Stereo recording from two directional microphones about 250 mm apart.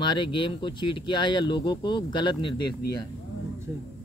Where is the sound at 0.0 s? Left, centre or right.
Centre.